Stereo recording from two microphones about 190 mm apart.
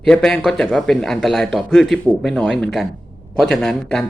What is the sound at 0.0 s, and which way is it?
Speech, 5° left (ahead or behind).